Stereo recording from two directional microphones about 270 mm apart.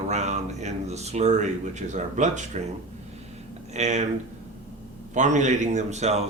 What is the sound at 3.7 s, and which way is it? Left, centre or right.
Speech, right.